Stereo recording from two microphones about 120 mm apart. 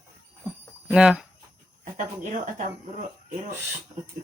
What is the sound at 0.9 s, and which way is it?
Speech, 5° right (ahead or behind).